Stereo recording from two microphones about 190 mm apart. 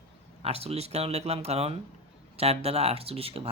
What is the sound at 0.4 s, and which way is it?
Speech, 30° right (ahead or behind).